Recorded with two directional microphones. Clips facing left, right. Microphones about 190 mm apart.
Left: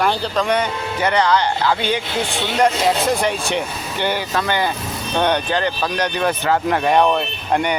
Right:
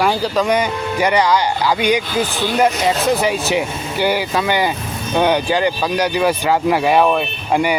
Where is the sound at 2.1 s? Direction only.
25° left (ahead or behind).